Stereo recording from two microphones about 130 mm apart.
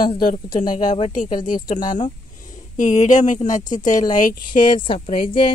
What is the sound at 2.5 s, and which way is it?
Speech, 65° left (ahead or behind).